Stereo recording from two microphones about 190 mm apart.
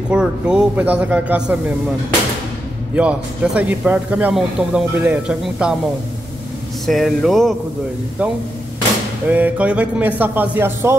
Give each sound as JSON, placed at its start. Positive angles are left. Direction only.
{"t": 0.1, "sound": "a man's voice", "side_deg": -5}
{"t": 3.0, "sound": "a man's voice", "side_deg": -5}
{"t": 6.9, "sound": "speech", "side_deg": 0}
{"t": 9.3, "sound": "a man's voice", "side_deg": -10}